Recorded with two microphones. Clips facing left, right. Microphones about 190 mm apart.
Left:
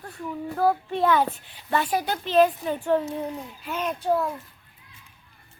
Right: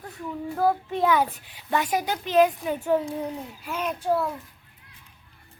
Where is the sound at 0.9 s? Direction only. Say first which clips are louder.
Left 1 dB; 10° right (ahead or behind).